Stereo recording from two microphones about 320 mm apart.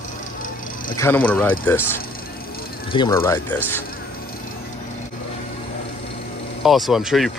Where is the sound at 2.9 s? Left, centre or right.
Centre.